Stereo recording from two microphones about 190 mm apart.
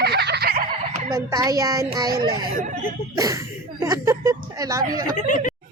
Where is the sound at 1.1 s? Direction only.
15° right (ahead or behind).